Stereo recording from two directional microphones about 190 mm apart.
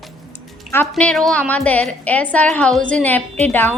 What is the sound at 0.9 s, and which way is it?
A woman's voice, centre (ahead or behind).